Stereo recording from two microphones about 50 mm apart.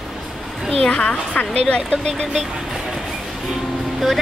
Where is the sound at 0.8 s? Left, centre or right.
Centre.